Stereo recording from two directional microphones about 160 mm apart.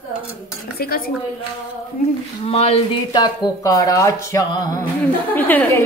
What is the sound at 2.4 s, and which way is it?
Speech, 40° left (ahead or behind).